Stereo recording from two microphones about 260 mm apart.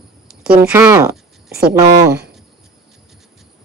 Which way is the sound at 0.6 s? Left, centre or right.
Centre.